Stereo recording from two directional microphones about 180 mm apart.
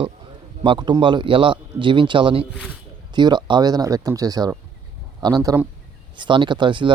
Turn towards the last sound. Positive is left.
turn(degrees=-25)  # may be behind; listen again after turning